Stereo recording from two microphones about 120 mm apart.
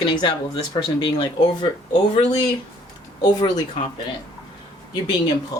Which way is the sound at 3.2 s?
35° left (ahead or behind).